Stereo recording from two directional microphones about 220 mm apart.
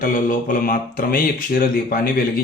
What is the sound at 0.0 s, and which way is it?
Speech, 35° left (ahead or behind).